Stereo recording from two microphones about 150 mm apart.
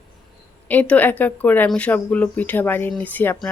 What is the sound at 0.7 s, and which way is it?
A woman's voice, 10° left (ahead or behind).